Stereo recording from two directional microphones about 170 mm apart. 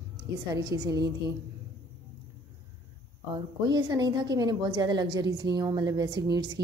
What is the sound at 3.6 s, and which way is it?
A woman's voice, 25° right (ahead or behind).